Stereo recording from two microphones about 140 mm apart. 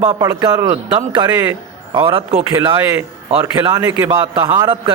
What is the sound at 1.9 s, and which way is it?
Speech, 35° right (ahead or behind).